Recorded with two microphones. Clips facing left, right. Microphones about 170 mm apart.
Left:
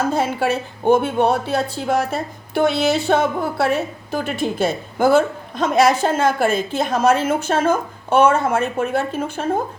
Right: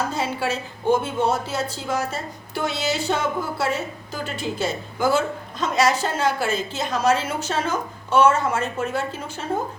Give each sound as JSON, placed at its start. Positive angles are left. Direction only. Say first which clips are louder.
{"t": 0.1, "sound": "a woman's voice", "louder": "left 6 dB", "side_deg": 55}